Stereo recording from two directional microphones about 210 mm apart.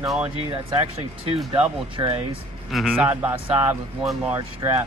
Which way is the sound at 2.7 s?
Centre (ahead or behind).